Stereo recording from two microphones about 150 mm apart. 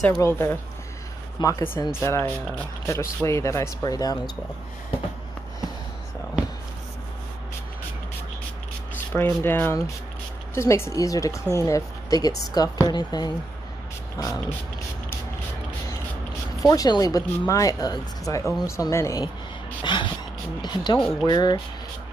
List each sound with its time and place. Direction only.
0.2 s speech: 15° left (ahead or behind)
9.1 s speech: 15° left (ahead or behind)
16.6 s speech: 25° left (ahead or behind)
19.8 s a sound: 30° left (ahead or behind)
20.6 s speech: 30° left (ahead or behind)
21.0 s speech: centre (ahead or behind)
21.3 s speech: 30° left (ahead or behind)